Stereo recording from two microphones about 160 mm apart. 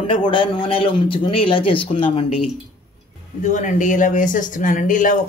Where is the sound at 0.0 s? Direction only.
35° left (ahead or behind).